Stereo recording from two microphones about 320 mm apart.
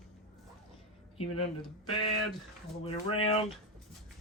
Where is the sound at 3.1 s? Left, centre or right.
Centre.